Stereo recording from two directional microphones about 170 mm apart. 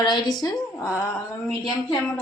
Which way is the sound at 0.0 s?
25° left (ahead or behind).